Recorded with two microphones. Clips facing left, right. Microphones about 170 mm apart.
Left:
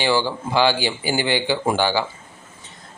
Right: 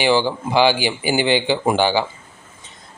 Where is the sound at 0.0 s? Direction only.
15° right (ahead or behind).